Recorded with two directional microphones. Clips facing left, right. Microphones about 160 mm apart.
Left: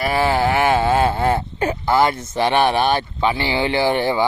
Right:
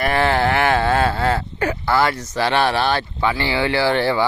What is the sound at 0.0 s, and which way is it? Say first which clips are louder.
Speech: even; 10° left (ahead or behind).